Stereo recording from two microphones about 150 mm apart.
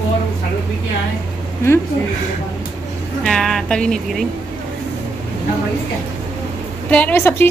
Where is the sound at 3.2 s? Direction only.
5° left (ahead or behind).